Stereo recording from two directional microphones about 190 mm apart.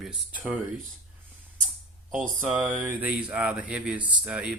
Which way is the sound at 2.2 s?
Centre (ahead or behind).